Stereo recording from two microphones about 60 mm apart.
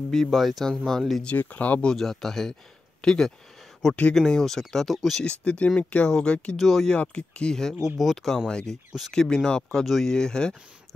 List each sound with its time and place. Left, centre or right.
0.1 s speech: centre
1.2 s speech: left
1.9 s speech: centre
5.2 s speech: centre
6.6 s speech: centre
6.9 s speech: centre
7.8 s speech: centre
9.8 s speech: centre
10.1 s speech: centre